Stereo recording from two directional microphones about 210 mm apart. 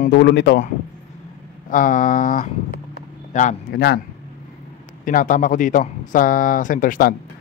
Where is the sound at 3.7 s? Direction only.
50° left (ahead or behind).